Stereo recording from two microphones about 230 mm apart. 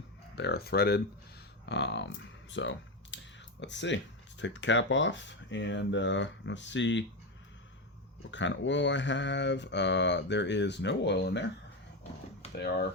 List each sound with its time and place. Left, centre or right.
0.3 s speech: left
8.3 s speech: left